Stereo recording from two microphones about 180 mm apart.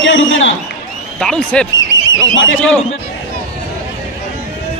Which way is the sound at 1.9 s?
90° left.